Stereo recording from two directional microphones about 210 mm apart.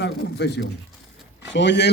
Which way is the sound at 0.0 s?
50° left (ahead or behind).